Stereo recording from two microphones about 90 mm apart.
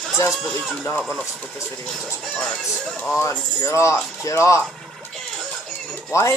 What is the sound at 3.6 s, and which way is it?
Speech, 35° left (ahead or behind).